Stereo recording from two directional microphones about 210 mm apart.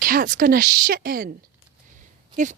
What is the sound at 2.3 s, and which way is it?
Speech, 35° right (ahead or behind).